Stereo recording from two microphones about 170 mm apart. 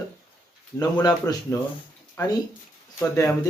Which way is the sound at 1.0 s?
20° left (ahead or behind).